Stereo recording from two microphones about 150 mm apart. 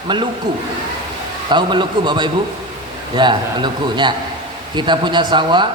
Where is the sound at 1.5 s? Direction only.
30° right (ahead or behind).